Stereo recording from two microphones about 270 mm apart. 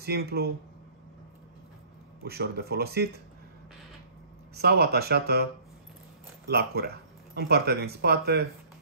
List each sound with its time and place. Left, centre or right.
0.0 s speech: right
2.2 s speech: right
4.6 s speech: right